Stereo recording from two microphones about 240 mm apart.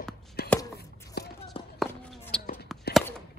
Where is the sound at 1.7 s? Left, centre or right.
Centre.